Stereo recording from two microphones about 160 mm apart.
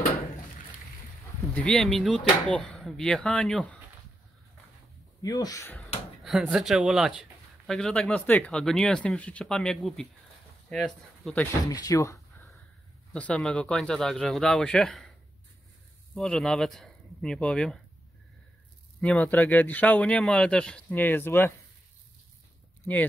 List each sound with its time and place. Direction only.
1.4 s speech: 10° left (ahead or behind)
5.2 s speech: 20° left (ahead or behind)
6.2 s speech: centre (ahead or behind)
11.7 s speech: 20° left (ahead or behind)
13.1 s speech: 5° left (ahead or behind)
16.2 s speech: centre (ahead or behind)
18.9 s a man's voice: 5° left (ahead or behind)